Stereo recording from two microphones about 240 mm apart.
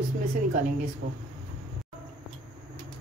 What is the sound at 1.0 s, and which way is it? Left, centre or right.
Speech, right.